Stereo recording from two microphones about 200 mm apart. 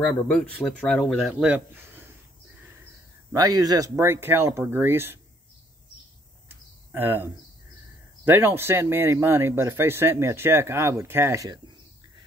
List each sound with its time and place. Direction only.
0.0 s speech: 5° left (ahead or behind)
3.3 s speech: 20° right (ahead or behind)
6.5 s cricket: 10° right (ahead or behind)
8.3 s speech: 10° right (ahead or behind)